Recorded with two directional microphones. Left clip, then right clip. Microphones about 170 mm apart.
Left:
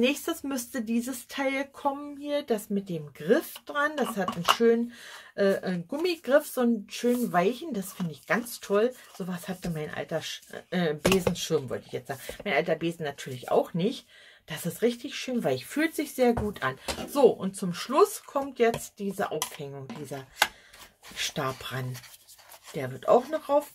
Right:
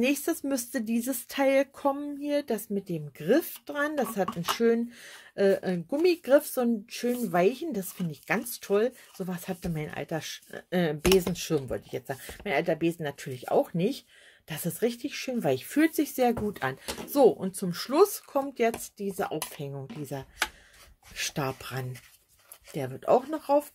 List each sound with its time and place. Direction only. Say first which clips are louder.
0.0 s speech: even; 35° right (ahead or behind)